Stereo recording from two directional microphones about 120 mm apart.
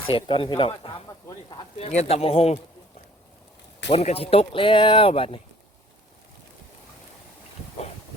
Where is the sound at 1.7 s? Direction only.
65° left (ahead or behind).